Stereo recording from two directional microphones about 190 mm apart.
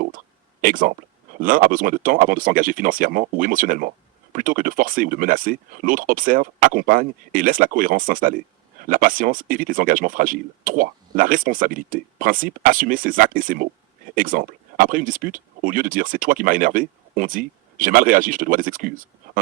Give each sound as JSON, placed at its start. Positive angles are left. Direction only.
{"t": 0.6, "sound": "speech", "side_deg": -45}